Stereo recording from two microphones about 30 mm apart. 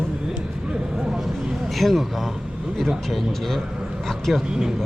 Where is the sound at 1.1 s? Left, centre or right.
Centre.